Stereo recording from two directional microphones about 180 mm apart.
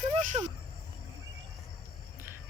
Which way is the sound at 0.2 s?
40° right (ahead or behind).